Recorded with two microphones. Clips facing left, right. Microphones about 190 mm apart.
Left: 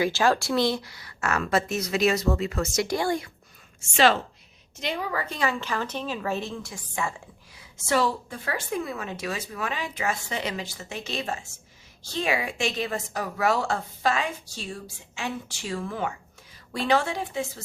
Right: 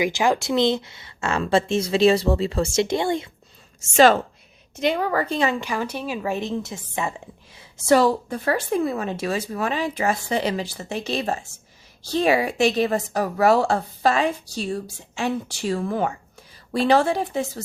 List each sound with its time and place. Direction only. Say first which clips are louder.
0.0 s speech: right 2 dB; 15° right (ahead or behind)
3.8 s a woman's voice: right 6 dB; 45° right (ahead or behind)
4.8 s a woman's voice: right 8 dB; 60° right (ahead or behind)
5.3 s speech: right 6 dB; 25° right (ahead or behind)
5.5 s a woman's voice: right 3 dB; 10° right (ahead or behind)
7.9 s a woman's voice: right 7 dB; 40° right (ahead or behind)